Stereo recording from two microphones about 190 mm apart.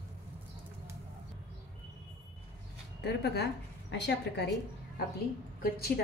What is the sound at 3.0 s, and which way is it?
A woman's voice, 60° left (ahead or behind).